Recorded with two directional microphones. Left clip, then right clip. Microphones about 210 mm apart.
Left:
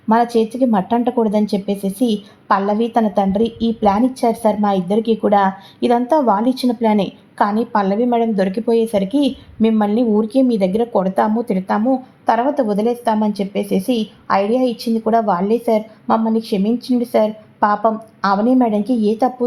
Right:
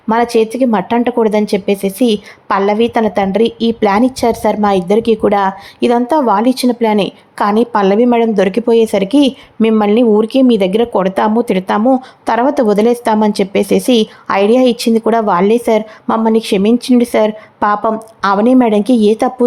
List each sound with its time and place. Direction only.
0.1 s a woman's voice: 15° right (ahead or behind)